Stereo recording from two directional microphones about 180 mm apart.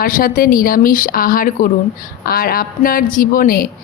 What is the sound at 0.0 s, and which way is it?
A woman's voice, 50° left (ahead or behind).